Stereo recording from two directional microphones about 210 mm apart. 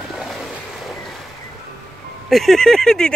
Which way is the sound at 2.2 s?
Centre (ahead or behind).